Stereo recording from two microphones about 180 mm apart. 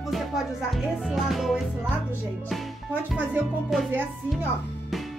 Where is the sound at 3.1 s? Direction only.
5° right (ahead or behind).